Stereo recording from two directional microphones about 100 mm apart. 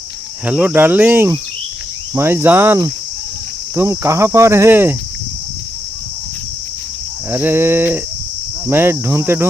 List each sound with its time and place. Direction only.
0.4 s cricket: 15° right (ahead or behind)
3.8 s cricket: 30° right (ahead or behind)
7.3 s cricket: 25° right (ahead or behind)